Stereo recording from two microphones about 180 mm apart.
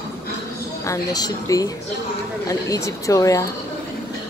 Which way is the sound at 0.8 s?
20° left (ahead or behind).